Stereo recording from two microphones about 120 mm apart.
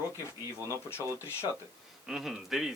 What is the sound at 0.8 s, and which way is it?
Speech, 20° left (ahead or behind).